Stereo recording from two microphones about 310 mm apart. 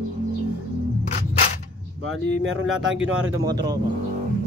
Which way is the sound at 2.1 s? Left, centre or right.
Right.